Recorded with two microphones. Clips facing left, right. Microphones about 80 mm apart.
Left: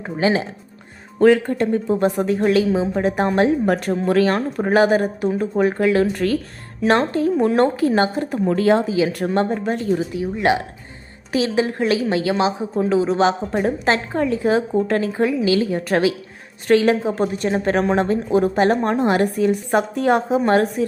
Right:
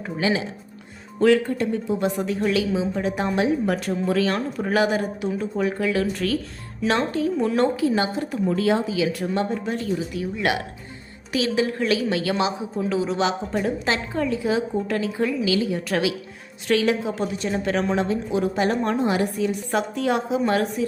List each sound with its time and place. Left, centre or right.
0.0 s speech: left
8.4 s speech: left
8.9 s a woman's voice: left
9.1 s speech: left
10.4 s a woman's voice: left
17.3 s speech: left
18.9 s speech: left